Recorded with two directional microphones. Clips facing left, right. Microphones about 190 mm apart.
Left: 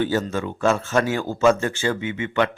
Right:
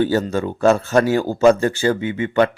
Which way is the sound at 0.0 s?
35° right (ahead or behind).